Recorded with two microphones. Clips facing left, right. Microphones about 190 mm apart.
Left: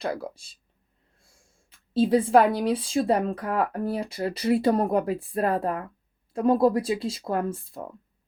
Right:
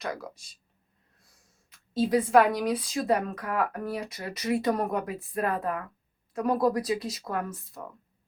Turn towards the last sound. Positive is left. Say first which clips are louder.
# left 5 dB
turn(degrees=30)  # may be behind; listen again after turning